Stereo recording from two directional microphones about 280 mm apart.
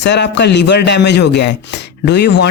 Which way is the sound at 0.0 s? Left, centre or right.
Left.